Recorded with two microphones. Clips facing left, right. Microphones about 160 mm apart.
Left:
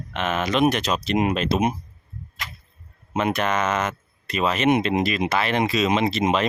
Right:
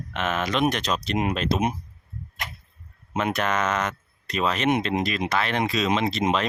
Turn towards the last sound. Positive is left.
turn(degrees=5)  # may be behind; listen again after turning